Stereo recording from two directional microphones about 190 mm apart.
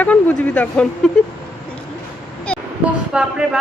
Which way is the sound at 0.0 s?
5° left (ahead or behind).